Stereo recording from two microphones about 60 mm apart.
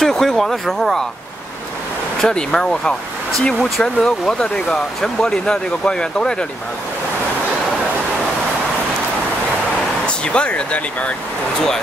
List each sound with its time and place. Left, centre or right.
0.0 s speech: centre
2.2 s speech: centre
10.0 s speech: centre